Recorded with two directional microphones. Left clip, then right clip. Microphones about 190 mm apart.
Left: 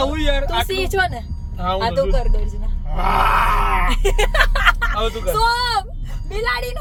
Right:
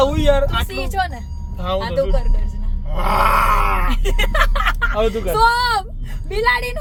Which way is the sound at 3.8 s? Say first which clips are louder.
Left 3 dB; 55° left (ahead or behind).